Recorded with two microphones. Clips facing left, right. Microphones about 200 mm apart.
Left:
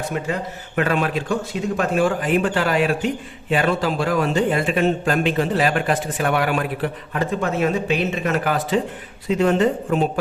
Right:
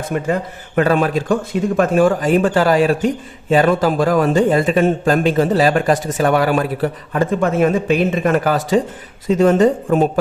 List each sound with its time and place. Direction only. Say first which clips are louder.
0.8 s speech: right 6 dB; 40° right (ahead or behind)
1.3 s speech: right 5 dB; 55° right (ahead or behind)